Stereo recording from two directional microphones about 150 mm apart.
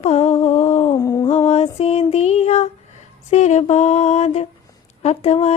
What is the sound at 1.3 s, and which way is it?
Music, 45° left (ahead or behind).